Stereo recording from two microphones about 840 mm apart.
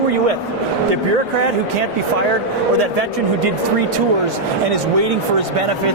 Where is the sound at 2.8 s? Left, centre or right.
Right.